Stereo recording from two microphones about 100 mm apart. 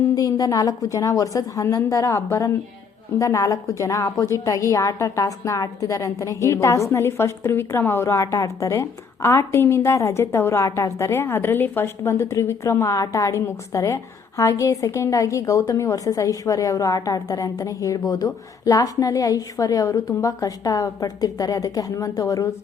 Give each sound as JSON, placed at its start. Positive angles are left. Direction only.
{"t": 0.1, "sound": "a woman's voice", "side_deg": 35}